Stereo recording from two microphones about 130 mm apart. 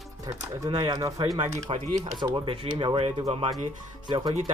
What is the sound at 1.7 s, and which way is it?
Speech, 45° right (ahead or behind).